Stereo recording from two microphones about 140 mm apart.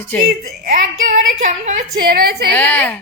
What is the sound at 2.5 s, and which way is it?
Speech, 15° left (ahead or behind).